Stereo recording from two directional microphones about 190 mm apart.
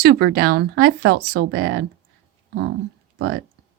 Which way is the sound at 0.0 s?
55° right (ahead or behind).